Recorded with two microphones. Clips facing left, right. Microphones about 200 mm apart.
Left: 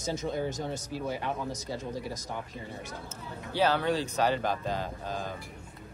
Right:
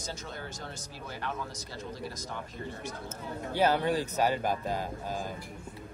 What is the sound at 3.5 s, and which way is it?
Speech, 10° right (ahead or behind).